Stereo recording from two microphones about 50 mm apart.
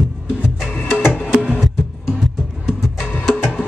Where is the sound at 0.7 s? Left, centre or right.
Left.